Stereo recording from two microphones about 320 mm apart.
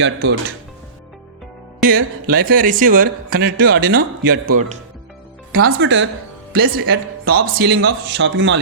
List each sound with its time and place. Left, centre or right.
0.0 s speech: right
1.8 s speech: right